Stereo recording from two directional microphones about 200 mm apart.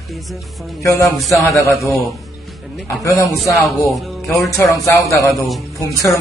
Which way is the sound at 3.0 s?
15° left (ahead or behind).